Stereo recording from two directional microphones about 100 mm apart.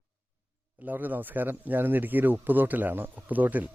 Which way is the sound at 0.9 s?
20° right (ahead or behind).